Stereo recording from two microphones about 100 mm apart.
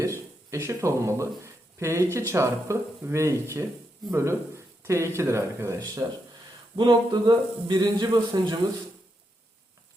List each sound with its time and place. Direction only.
0.0 s speech: 30° right (ahead or behind)
6.7 s a man's voice: 50° right (ahead or behind)